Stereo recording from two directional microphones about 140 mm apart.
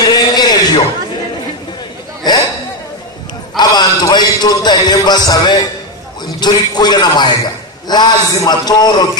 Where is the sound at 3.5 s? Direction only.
30° left (ahead or behind).